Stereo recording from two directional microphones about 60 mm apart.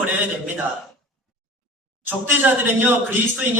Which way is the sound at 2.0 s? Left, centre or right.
Right.